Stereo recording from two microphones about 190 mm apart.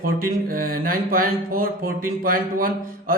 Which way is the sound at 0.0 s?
50° right (ahead or behind).